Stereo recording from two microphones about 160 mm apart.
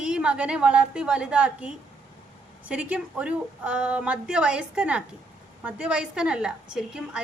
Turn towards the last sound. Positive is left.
turn(degrees=-5)  # may be behind; listen again after turning